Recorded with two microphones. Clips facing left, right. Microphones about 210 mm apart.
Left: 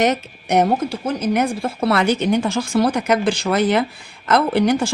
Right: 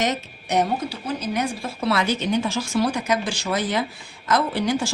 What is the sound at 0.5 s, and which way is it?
A woman's voice, 50° left (ahead or behind).